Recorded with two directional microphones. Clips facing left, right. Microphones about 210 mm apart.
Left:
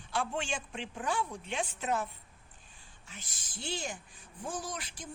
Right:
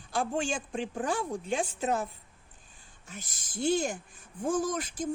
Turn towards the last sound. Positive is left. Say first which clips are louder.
# right 11 dB
turn(degrees=-45)  # may be behind; listen again after turning